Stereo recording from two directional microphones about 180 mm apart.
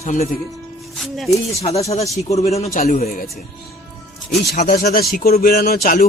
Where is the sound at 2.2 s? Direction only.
35° left (ahead or behind).